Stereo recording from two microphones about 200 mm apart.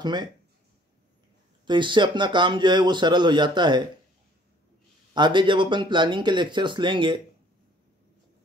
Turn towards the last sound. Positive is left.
turn(degrees=-25)  # may be behind; listen again after turning